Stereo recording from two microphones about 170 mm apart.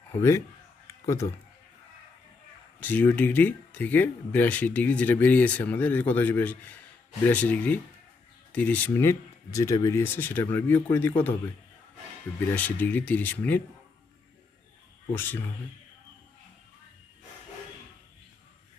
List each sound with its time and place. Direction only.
0.2 s speech: 15° left (ahead or behind)
2.8 s speech: 10° left (ahead or behind)
12.5 s speech: 10° left (ahead or behind)
15.1 s speech: 10° left (ahead or behind)